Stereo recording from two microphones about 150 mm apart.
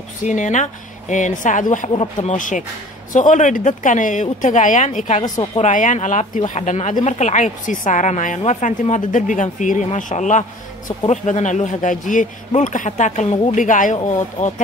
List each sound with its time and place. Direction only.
0.2 s a man's voice: 55° left (ahead or behind)
5.2 s a woman's voice: 25° left (ahead or behind)
5.6 s a man's voice: 55° left (ahead or behind)